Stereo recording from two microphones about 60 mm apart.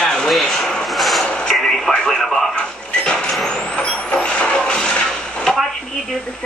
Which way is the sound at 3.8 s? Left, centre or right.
Centre.